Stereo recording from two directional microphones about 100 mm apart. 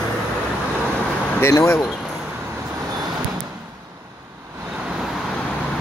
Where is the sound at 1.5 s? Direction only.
30° left (ahead or behind).